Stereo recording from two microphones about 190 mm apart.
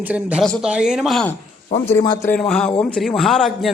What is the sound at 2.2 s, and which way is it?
A man's voice, 5° left (ahead or behind).